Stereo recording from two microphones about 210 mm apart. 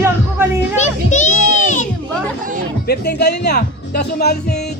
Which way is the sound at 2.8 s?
50° left (ahead or behind).